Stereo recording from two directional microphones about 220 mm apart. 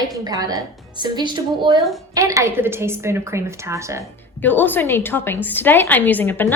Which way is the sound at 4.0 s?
10° left (ahead or behind).